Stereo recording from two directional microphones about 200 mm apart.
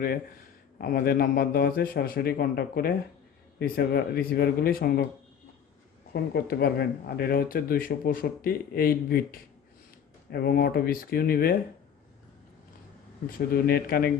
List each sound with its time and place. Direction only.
0.8 s speech: 50° left (ahead or behind)
6.3 s speech: 50° left (ahead or behind)
10.3 s speech: 50° left (ahead or behind)
13.3 s speech: 50° left (ahead or behind)